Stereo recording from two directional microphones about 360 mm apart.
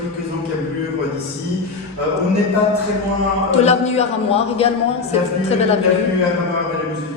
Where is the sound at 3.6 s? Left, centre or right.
Centre.